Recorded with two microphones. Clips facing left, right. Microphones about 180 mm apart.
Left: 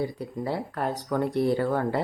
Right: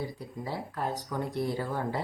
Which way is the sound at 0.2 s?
65° left (ahead or behind).